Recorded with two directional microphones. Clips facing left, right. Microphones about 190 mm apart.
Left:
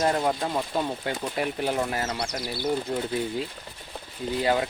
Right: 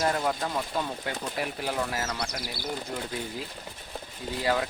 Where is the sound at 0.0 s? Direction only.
30° left (ahead or behind).